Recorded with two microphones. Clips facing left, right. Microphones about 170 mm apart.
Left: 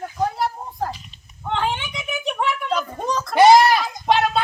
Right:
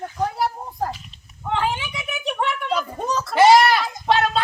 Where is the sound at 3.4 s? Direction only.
15° left (ahead or behind).